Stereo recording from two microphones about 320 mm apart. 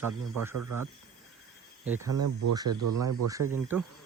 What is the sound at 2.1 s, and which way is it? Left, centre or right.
Speech, right.